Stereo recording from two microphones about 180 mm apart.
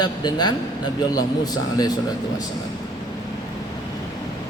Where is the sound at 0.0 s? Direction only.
25° left (ahead or behind).